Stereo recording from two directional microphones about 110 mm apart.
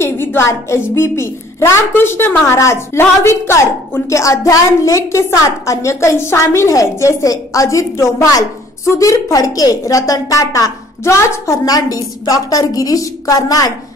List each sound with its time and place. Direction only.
0.0 s a woman's voice: 20° left (ahead or behind)